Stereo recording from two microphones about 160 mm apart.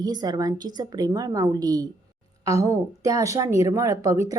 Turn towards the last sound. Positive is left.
turn(degrees=-20)  # may be behind; listen again after turning